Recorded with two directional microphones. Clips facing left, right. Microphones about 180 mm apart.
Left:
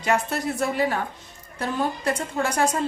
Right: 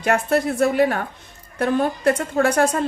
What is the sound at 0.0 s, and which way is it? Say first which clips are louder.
Speech: right 5 dB; 55° right (ahead or behind).